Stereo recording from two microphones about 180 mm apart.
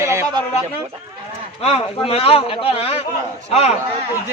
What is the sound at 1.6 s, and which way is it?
A man's voice, 35° left (ahead or behind).